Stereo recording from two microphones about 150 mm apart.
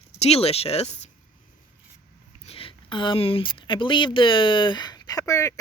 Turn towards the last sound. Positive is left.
turn(degrees=20)  # may be behind; listen again after turning